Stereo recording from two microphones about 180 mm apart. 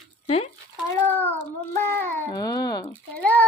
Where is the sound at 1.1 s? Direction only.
10° left (ahead or behind).